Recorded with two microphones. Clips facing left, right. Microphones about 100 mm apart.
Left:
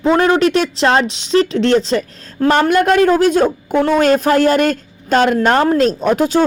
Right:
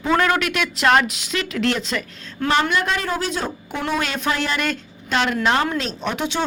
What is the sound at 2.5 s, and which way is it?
A woman's voice, 45° left (ahead or behind).